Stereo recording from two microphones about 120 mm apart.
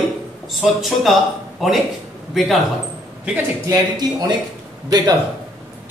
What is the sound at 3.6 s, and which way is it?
Speech, 30° right (ahead or behind).